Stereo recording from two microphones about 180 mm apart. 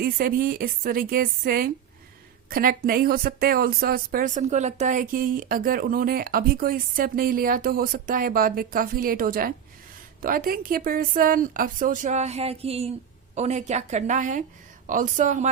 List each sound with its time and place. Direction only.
0.0 s a woman's voice: 55° right (ahead or behind)